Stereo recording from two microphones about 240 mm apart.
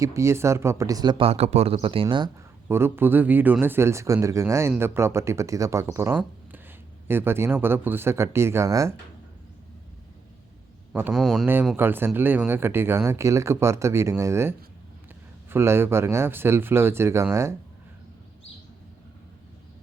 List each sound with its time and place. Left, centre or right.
0.0 s a man's voice: centre
10.9 s a man's voice: centre